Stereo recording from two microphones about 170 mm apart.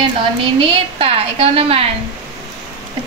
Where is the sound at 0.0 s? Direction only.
30° right (ahead or behind).